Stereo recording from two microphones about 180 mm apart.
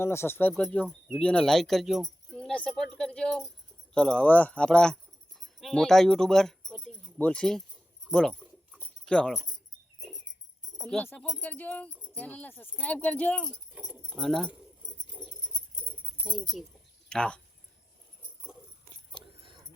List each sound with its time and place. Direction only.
0.0 s speech: 15° left (ahead or behind)
8.0 s keys jangling: 5° left (ahead or behind)
9.0 s speech: 5° left (ahead or behind)
10.8 s speech: 10° left (ahead or behind)
16.2 s speech: 5° right (ahead or behind)
19.1 s a sound: 30° right (ahead or behind)